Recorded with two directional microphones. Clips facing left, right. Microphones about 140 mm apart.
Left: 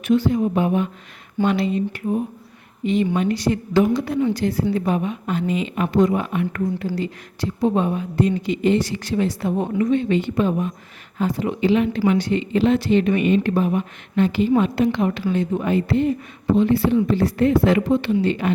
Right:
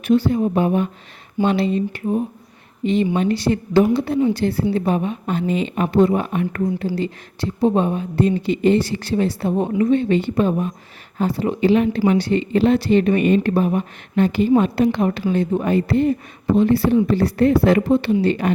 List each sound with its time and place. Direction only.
0.0 s a woman's voice: 35° right (ahead or behind)
7.6 s speech: 30° right (ahead or behind)
11.6 s speech: 45° right (ahead or behind)